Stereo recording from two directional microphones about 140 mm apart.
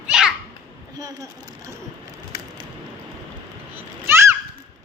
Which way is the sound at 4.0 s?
20° right (ahead or behind).